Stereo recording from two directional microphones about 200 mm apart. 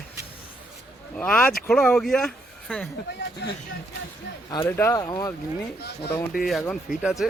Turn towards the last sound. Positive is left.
turn(degrees=0)  # may be behind; listen again after turning